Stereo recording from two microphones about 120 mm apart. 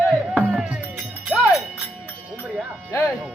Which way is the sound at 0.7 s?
5° right (ahead or behind).